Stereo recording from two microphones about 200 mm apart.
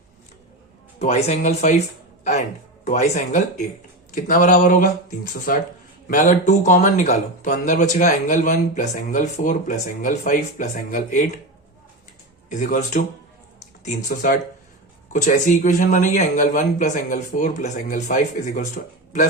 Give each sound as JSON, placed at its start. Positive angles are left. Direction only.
{"t": 0.9, "sound": "speech", "side_deg": 30}
{"t": 2.8, "sound": "speech", "side_deg": 35}
{"t": 12.5, "sound": "speech", "side_deg": 40}